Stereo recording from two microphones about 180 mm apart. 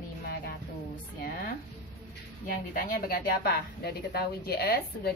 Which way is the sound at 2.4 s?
55° left (ahead or behind).